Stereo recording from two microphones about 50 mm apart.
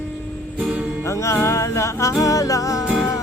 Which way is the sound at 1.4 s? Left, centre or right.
Left.